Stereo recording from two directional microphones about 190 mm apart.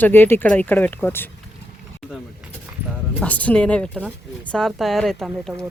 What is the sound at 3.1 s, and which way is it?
Speech, 5° left (ahead or behind).